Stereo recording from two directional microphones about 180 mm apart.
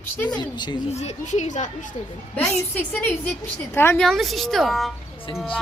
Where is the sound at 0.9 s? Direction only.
40° left (ahead or behind).